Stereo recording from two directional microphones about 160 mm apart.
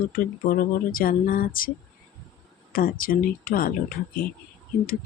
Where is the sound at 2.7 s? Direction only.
65° left (ahead or behind).